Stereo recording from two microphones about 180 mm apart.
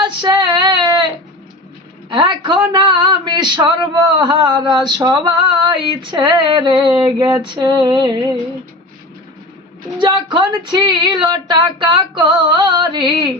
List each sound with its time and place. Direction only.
0.0 s female singing: 25° right (ahead or behind)
2.0 s speech: 25° right (ahead or behind)
10.0 s speech: 25° right (ahead or behind)